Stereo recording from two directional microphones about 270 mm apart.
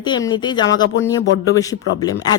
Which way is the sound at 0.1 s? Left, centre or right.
Centre.